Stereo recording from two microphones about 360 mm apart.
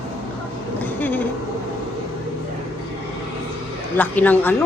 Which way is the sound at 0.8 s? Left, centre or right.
Centre.